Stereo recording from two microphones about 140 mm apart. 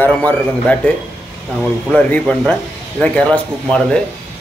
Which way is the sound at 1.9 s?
10° left (ahead or behind).